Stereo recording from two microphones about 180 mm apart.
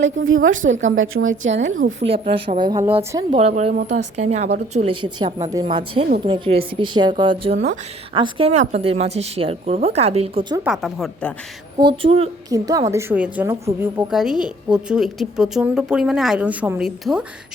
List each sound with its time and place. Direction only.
0.4 s a woman's voice: 90° right
2.0 s a woman's voice: 30° right (ahead or behind); by 3.2 s 15° right (ahead or behind)
3.3 s a woman's voice: 35° right (ahead or behind)
5.5 s a woman's voice: 25° right (ahead or behind)
10.6 s a woman's voice: centre (ahead or behind)
11.8 s a woman's voice: 30° right (ahead or behind)
12.5 s a woman's voice: 20° right (ahead or behind); by 17.2 s centre (ahead or behind)